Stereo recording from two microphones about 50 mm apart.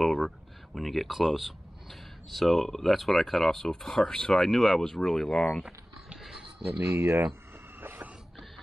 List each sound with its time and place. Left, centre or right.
0.0 s speech: centre
6.8 s speech: right
7.8 s a sound: right